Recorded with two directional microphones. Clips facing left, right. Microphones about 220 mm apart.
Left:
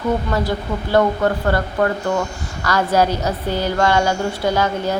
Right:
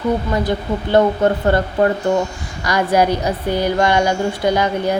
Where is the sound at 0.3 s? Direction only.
20° right (ahead or behind).